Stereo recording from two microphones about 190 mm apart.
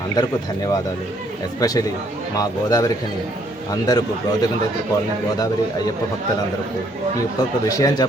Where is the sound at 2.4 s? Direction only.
20° left (ahead or behind).